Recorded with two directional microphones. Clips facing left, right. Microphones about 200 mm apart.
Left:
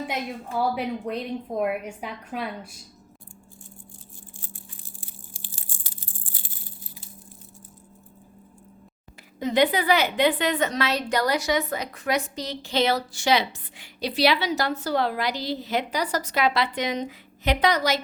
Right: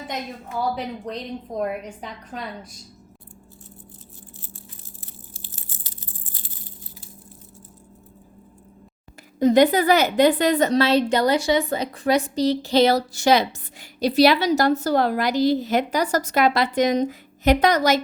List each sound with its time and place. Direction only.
0.8 s a woman's voice: 10° left (ahead or behind)
4.4 s crushing: 15° left (ahead or behind)
9.4 s a woman's voice: 45° right (ahead or behind)